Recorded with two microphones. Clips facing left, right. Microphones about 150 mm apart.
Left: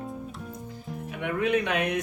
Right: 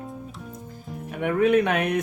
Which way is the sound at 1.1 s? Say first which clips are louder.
Right 6 dB; 50° right (ahead or behind).